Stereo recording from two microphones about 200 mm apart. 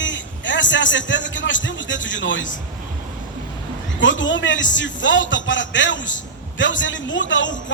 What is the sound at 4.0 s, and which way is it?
A man's voice, 65° left (ahead or behind).